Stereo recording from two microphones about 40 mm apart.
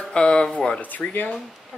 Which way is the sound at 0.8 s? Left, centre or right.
Left.